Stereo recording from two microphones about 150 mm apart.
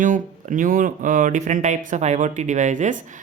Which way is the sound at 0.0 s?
60° right (ahead or behind).